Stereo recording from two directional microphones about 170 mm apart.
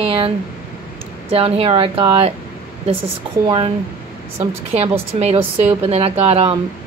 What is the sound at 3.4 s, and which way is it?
Speech, 30° right (ahead or behind).